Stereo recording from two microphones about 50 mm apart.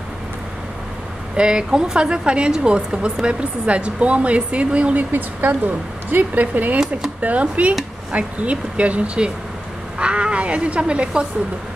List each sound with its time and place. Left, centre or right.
1.3 s speech: centre
5.1 s speech: right